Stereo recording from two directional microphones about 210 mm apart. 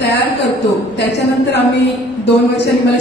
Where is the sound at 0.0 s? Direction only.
55° left (ahead or behind).